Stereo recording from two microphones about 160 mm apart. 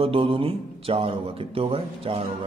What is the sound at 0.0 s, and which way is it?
A man's voice, 35° right (ahead or behind).